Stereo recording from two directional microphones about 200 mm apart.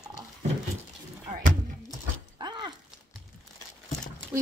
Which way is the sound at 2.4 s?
20° right (ahead or behind).